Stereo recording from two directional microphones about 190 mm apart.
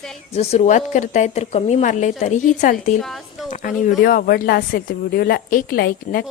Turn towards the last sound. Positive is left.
turn(degrees=50)  # may be behind; listen again after turning